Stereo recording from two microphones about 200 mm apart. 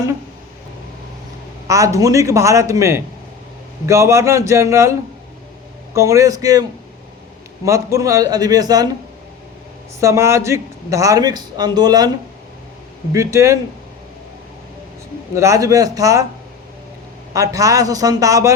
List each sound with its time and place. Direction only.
1.6 s a man's voice: 15° right (ahead or behind)
10.0 s a man's voice: 15° right (ahead or behind)
13.1 s a man's voice: 15° right (ahead or behind)
15.4 s a man's voice: 15° right (ahead or behind)
17.3 s a man's voice: 15° right (ahead or behind)